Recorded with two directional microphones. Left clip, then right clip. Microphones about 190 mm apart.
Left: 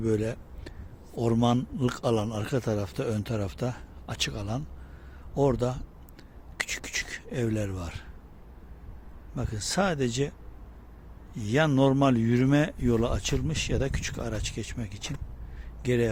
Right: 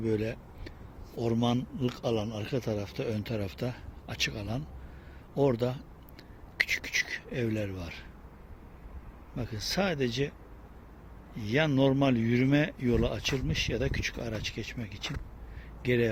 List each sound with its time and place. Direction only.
0.0 s a man's voice: 20° left (ahead or behind)
9.3 s a man's voice: 15° left (ahead or behind)
11.3 s a man's voice: 20° left (ahead or behind)